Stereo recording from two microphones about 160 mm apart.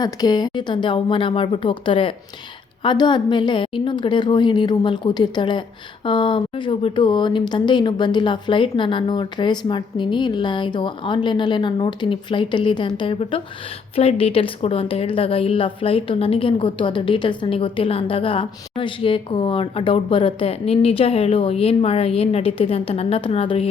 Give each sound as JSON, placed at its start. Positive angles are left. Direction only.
{"t": 0.0, "sound": "a woman's voice", "side_deg": 25}